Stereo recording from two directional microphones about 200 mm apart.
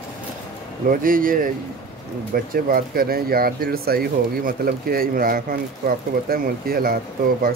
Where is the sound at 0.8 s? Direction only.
45° right (ahead or behind).